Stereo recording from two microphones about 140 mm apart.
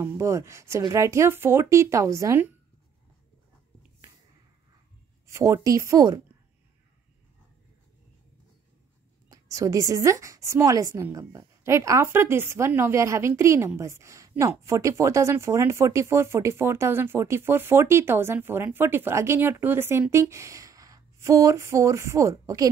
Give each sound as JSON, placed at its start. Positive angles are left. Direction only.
{"t": 0.0, "sound": "speech", "side_deg": -20}
{"t": 5.2, "sound": "speech", "side_deg": -20}
{"t": 9.3, "sound": "speech", "side_deg": -25}